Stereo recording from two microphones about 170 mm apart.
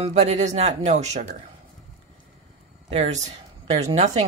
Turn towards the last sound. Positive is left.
turn(degrees=-40)  # may be behind; listen again after turning